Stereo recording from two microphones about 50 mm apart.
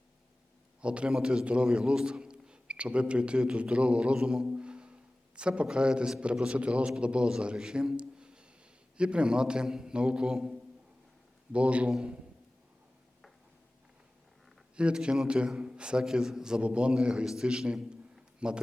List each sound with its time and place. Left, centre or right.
0.8 s a man's voice: right
4.5 s a sound: centre
5.4 s a man's voice: centre
11.5 s a man's voice: right
14.8 s a man's voice: right